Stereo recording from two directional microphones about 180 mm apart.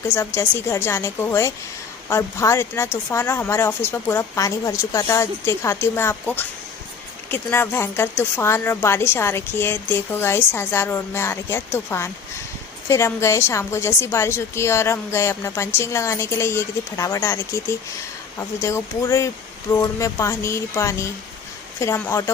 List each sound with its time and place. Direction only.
0.1 s a woman's voice: 15° left (ahead or behind)